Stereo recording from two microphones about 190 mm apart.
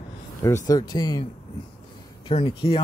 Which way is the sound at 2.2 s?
30° left (ahead or behind).